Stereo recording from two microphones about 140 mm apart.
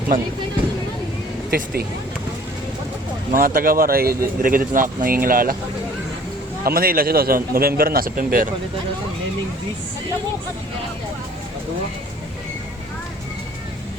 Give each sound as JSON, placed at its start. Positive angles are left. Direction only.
{"t": 1.5, "sound": "speech", "side_deg": -90}
{"t": 3.3, "sound": "speech", "side_deg": -90}
{"t": 6.7, "sound": "speech", "side_deg": -90}